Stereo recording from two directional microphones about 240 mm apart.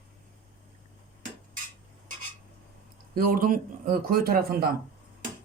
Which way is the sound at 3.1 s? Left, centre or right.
Right.